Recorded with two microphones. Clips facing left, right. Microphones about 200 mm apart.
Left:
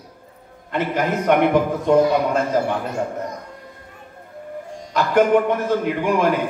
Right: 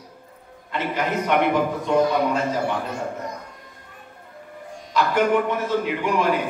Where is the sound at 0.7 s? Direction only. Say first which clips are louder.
Left 4 dB; 50° left (ahead or behind).